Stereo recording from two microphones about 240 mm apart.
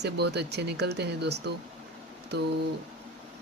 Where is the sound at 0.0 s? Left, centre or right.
Right.